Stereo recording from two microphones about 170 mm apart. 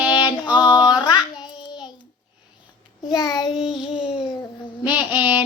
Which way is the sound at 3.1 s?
25° left (ahead or behind).